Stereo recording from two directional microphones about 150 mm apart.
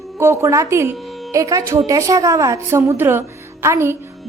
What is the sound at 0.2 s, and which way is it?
A woman's voice, 20° right (ahead or behind).